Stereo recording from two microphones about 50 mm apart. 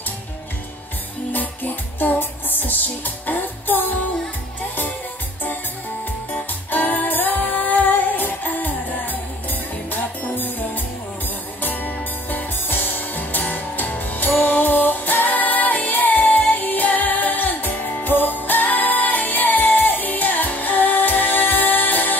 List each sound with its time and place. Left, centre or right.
1.3 s music: left
6.3 s music: left
11.6 s music: left